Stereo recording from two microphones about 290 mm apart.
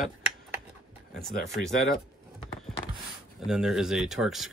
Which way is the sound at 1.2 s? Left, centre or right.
Centre.